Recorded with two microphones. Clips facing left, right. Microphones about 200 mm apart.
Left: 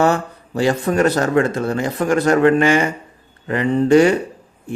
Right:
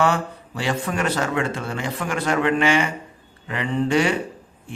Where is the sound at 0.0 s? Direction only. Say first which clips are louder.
Left 4 dB; 40° left (ahead or behind).